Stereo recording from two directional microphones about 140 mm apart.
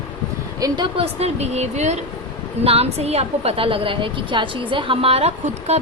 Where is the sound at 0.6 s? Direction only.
25° right (ahead or behind).